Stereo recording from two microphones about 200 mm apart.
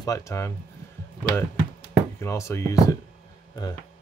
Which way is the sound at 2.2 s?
15° left (ahead or behind).